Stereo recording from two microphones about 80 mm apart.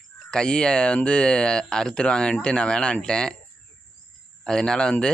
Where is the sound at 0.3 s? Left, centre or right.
Centre.